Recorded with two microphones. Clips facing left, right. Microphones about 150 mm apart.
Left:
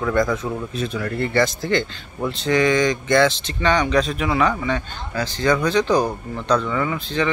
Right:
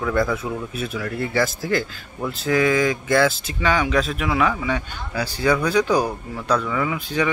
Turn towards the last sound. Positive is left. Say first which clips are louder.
# even
turn(degrees=-10)  # may be behind; listen again after turning